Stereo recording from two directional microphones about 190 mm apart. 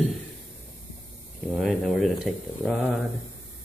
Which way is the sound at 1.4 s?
Centre (ahead or behind).